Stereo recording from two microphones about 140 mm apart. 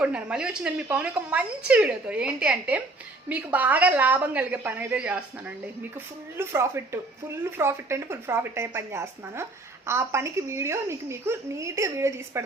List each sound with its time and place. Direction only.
0.0 s a woman's voice: 5° right (ahead or behind)
6.3 s a woman's voice: 15° right (ahead or behind)